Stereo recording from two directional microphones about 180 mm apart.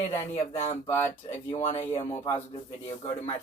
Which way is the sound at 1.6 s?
35° left (ahead or behind).